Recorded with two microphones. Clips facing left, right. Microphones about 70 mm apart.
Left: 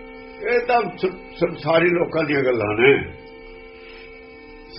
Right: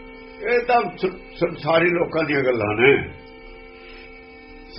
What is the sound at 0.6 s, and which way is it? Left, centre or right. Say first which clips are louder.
A man's voice: even; centre.